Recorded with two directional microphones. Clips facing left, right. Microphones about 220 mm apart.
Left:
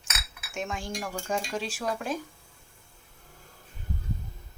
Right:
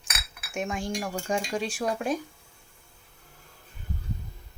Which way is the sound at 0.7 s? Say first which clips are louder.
Right 5 dB; 10° right (ahead or behind).